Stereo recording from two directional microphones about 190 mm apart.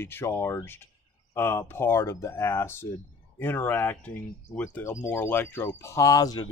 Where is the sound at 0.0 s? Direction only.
10° left (ahead or behind).